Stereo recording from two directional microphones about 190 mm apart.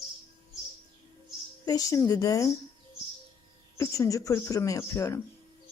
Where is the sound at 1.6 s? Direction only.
20° left (ahead or behind).